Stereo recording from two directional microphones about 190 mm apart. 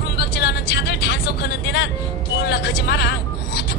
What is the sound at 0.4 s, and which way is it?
Vehicle, 60° left (ahead or behind).